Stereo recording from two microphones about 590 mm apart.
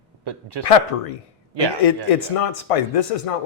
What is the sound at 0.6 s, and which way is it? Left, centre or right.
Speech, left.